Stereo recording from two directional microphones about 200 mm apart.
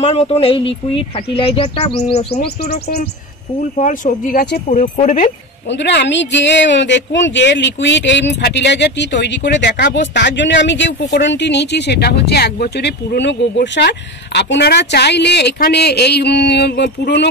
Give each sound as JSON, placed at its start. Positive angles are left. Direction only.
{"t": 0.0, "sound": "speech", "side_deg": 30}
{"t": 3.7, "sound": "speech", "side_deg": 40}
{"t": 5.7, "sound": "speech", "side_deg": 60}